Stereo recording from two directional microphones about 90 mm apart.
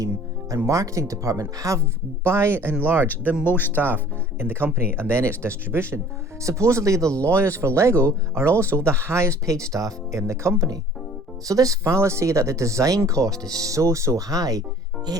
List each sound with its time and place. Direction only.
0.6 s speech: 35° right (ahead or behind)
3.4 s speech: 20° left (ahead or behind)
3.8 s speech: 20° right (ahead or behind); by 14.6 s 40° right (ahead or behind)